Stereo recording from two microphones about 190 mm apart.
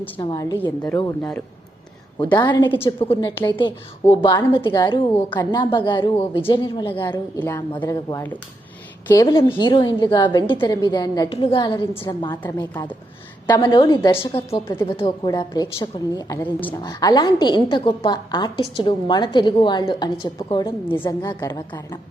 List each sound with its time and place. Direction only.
0.2 s a woman's voice: 20° left (ahead or behind)
0.6 s speech: 10° left (ahead or behind)
2.1 s a woman's voice: 25° left (ahead or behind)
2.6 s speech: 10° left (ahead or behind)
3.0 s a woman's voice: 25° left (ahead or behind)
16.4 s speech: 10° left (ahead or behind)
16.8 s a woman's voice: 20° left (ahead or behind)